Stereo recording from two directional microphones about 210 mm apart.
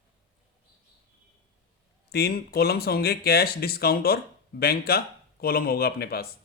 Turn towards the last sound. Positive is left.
turn(degrees=45)  # may be behind; listen again after turning